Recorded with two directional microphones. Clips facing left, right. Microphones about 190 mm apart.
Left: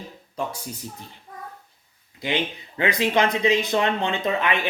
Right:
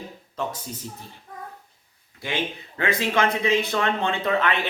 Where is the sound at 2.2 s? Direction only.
20° left (ahead or behind).